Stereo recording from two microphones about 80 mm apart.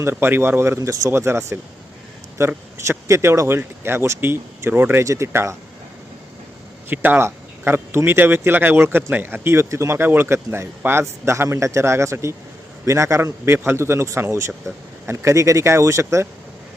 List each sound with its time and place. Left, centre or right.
0.0 s speech: right
2.7 s speech: right
5.0 s speech: right
6.9 s speech: right